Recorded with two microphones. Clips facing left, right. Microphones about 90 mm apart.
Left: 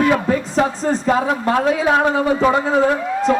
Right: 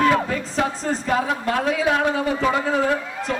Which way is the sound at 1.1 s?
30° left (ahead or behind).